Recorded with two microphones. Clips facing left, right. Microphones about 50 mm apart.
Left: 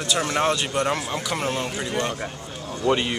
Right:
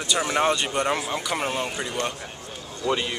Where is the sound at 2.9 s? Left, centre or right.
Centre.